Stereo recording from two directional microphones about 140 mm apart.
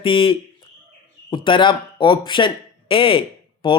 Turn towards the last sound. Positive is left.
turn(degrees=40)  # may be behind; listen again after turning